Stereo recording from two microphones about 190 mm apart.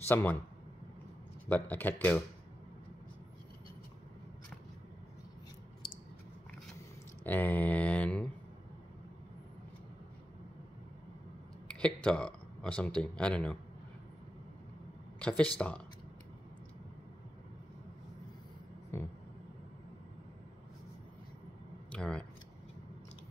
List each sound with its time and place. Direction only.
0.1 s speech: 10° left (ahead or behind)
1.5 s speech: 10° left (ahead or behind)
5.8 s chewing: 25° left (ahead or behind)
7.2 s mantra: 10° left (ahead or behind)
11.6 s speech: 5° left (ahead or behind)
15.1 s speech: 5° left (ahead or behind)
18.9 s speech: 10° left (ahead or behind)
21.9 s speech: 5° left (ahead or behind)